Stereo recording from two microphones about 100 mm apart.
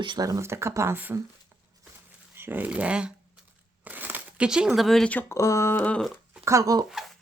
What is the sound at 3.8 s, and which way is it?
Crumpling, 20° right (ahead or behind).